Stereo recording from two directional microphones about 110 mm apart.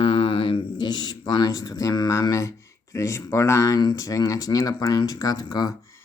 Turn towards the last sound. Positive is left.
turn(degrees=30)  # may be behind; listen again after turning